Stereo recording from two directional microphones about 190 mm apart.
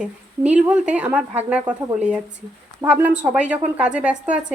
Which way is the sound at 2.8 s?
10° right (ahead or behind).